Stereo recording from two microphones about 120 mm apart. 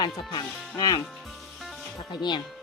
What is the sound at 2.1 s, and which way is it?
Speech, 40° left (ahead or behind).